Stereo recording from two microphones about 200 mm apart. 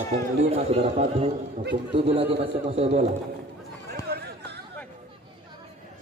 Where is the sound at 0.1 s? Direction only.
30° right (ahead or behind).